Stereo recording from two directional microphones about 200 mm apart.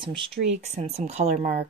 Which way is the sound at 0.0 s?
25° right (ahead or behind).